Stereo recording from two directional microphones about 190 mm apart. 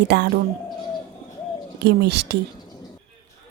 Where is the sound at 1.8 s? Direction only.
60° right (ahead or behind).